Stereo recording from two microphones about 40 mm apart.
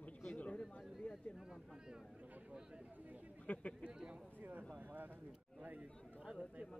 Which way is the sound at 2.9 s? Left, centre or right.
Right.